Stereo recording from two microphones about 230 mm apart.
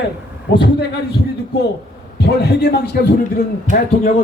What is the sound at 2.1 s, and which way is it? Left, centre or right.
A man's voice, left.